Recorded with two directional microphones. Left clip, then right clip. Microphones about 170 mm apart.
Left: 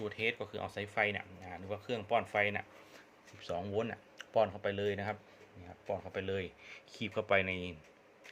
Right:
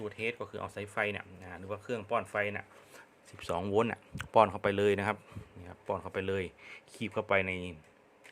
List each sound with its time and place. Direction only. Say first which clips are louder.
0.0 s speech: even; 5° right (ahead or behind)
3.3 s speech: right 6 dB; 40° right (ahead or behind); by 7.8 s 10° right (ahead or behind)